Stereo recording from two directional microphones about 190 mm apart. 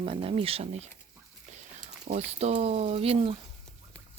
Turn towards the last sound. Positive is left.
turn(degrees=-30)  # may be behind; listen again after turning